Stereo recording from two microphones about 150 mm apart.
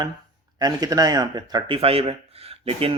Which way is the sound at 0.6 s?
25° right (ahead or behind).